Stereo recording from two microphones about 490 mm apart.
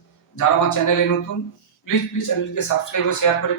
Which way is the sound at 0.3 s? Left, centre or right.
Left.